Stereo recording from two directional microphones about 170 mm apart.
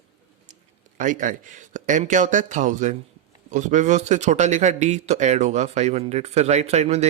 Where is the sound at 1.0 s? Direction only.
50° right (ahead or behind).